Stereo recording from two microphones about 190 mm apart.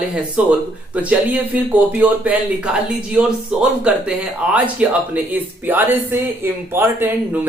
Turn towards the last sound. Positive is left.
turn(degrees=-10)  # may be behind; listen again after turning